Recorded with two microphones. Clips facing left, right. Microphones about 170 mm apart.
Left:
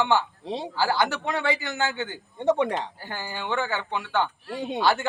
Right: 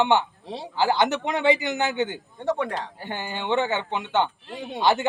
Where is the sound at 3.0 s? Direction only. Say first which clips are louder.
Right 3 dB; 20° right (ahead or behind).